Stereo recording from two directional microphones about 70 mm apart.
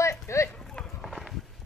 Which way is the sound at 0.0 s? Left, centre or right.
Left.